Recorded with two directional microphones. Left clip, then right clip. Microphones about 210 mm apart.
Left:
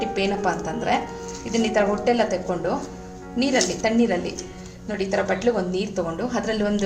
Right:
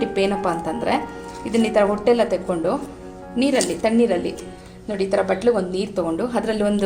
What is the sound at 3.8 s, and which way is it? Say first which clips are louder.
A woman's voice: right 3 dB; 30° right (ahead or behind).